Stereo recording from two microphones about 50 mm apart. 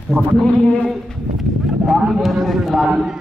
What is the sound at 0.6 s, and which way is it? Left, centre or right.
Speech, left.